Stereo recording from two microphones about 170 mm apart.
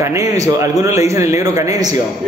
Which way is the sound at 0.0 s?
15° right (ahead or behind).